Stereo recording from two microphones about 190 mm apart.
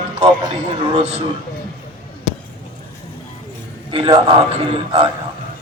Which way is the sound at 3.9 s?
25° right (ahead or behind).